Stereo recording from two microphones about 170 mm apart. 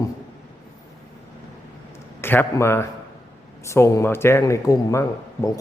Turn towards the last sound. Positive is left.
turn(degrees=20)  # may be behind; listen again after turning